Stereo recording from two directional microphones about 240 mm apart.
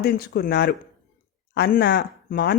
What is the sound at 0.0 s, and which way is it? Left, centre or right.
Speech, left.